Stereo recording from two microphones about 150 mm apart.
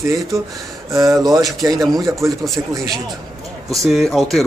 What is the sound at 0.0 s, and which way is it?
Speech, 20° right (ahead or behind).